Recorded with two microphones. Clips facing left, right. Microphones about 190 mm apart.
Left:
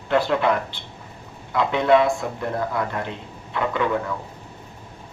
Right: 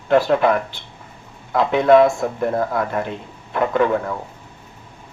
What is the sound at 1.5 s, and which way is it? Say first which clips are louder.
Speech: right 5 dB; 45° right (ahead or behind).